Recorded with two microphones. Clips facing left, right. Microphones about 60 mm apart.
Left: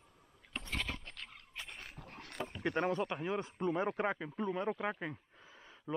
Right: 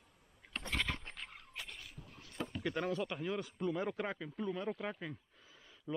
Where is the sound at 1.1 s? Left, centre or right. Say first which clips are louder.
Even; centre.